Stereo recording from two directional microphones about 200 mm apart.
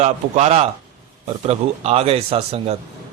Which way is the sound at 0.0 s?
35° right (ahead or behind).